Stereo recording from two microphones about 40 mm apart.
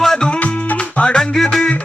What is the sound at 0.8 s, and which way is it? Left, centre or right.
Music, left.